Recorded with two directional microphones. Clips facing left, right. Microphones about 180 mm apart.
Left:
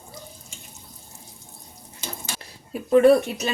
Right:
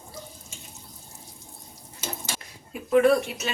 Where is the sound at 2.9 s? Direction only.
35° left (ahead or behind).